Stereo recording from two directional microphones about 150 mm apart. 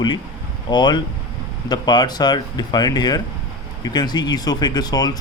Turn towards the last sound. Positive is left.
turn(degrees=25)  # may be behind; listen again after turning